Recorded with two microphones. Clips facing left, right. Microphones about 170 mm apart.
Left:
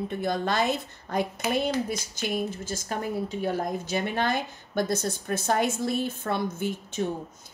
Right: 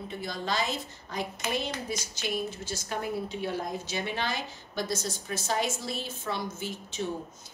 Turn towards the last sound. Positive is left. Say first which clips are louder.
# left 6 dB
turn(degrees=55)  # may be behind; listen again after turning